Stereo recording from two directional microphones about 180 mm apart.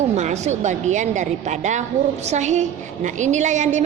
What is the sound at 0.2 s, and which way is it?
A woman's voice, 40° right (ahead or behind).